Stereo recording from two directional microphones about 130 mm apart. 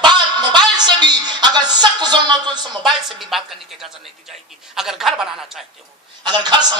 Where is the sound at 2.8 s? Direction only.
Centre (ahead or behind).